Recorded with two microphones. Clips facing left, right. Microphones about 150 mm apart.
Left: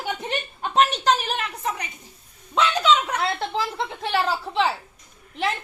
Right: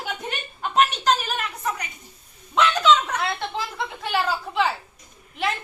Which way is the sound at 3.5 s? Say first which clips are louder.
Left 3 dB; 30° left (ahead or behind).